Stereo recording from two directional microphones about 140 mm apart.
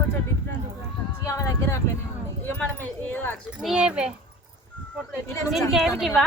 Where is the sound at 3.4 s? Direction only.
5° right (ahead or behind).